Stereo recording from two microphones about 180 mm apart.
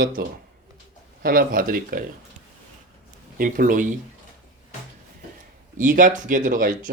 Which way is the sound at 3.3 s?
50° right (ahead or behind).